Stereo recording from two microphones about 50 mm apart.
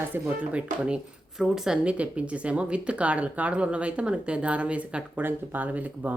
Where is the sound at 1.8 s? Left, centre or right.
Right.